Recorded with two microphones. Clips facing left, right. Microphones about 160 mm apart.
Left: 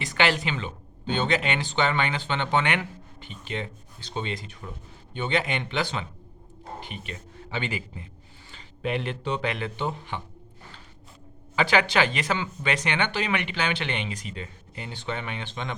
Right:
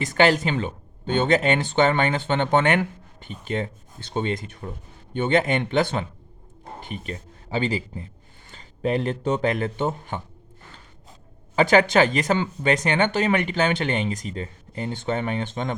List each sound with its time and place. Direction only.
0.0 s speech: 45° right (ahead or behind)
11.5 s speech: 45° right (ahead or behind)